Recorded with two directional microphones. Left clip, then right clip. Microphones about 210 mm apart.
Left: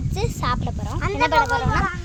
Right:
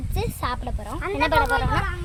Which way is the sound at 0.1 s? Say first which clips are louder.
Left 3 dB; 15° left (ahead or behind).